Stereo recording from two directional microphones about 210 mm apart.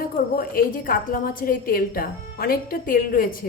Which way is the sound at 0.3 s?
45° left (ahead or behind).